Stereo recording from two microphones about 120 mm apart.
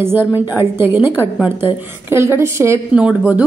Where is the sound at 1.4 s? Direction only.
20° right (ahead or behind).